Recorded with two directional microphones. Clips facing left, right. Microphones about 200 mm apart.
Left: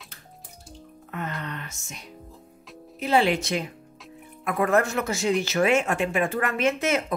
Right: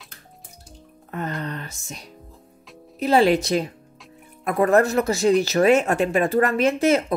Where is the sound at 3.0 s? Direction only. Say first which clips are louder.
Right 5 dB; 40° right (ahead or behind).